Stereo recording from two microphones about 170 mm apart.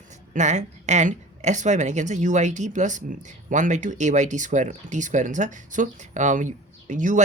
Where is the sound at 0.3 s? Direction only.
45° right (ahead or behind).